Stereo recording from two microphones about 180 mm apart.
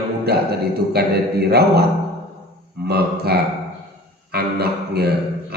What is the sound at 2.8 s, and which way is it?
A man's voice, 60° right (ahead or behind).